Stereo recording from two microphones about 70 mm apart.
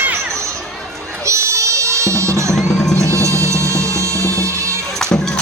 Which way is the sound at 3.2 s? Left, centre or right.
Right.